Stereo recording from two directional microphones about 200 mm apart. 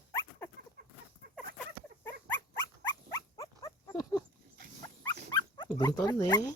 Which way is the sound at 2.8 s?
20° left (ahead or behind).